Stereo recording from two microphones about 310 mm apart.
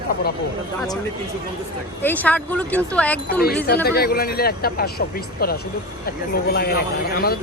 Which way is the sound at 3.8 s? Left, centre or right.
Left.